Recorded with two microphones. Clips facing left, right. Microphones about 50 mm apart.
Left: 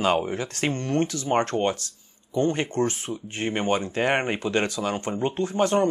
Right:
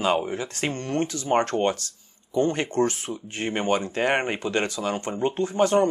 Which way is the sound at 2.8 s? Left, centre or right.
Left.